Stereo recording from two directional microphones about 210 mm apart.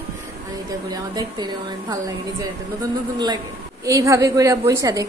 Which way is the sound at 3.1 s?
20° right (ahead or behind).